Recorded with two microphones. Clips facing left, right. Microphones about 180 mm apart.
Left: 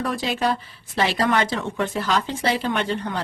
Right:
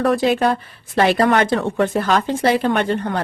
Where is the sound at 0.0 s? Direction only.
60° right (ahead or behind).